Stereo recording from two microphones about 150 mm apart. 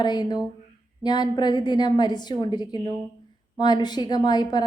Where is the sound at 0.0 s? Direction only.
30° left (ahead or behind).